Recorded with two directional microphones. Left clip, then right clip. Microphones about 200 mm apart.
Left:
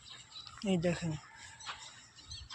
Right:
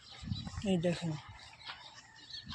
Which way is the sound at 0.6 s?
5° right (ahead or behind).